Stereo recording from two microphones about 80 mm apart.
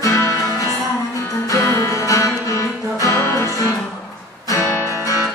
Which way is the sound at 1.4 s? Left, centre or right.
Left.